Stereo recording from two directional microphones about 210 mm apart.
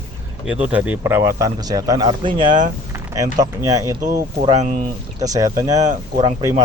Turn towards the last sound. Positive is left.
turn(degrees=-20)  # may be behind; listen again after turning